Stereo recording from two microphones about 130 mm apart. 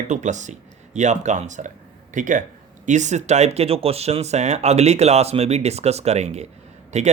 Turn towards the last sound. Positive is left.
turn(degrees=-60)  # may be behind; listen again after turning